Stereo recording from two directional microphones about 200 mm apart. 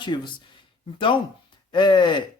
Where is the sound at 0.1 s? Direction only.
25° left (ahead or behind).